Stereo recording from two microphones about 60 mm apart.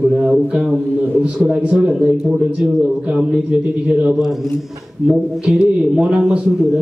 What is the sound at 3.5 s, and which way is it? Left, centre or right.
A man's voice, centre.